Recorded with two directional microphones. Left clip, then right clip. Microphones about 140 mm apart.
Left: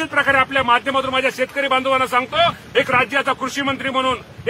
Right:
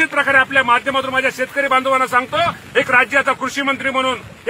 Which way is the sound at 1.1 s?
35° left (ahead or behind).